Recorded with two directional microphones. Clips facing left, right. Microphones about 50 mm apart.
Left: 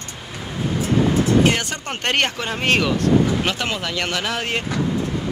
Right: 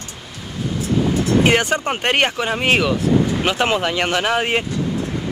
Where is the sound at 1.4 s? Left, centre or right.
Right.